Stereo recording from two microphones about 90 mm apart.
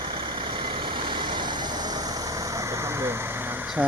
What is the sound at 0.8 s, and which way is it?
Vehicle, 65° right (ahead or behind).